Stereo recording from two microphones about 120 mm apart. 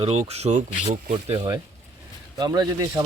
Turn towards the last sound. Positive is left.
turn(degrees=-35)  # may be behind; listen again after turning